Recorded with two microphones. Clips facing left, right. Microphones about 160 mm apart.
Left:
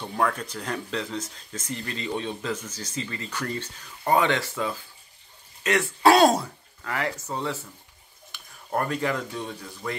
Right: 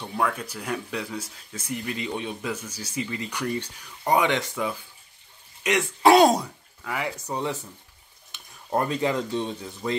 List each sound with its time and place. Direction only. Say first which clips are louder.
0.0 s speech: left 1 dB; centre (ahead or behind); by 9.9 s 25° right (ahead or behind)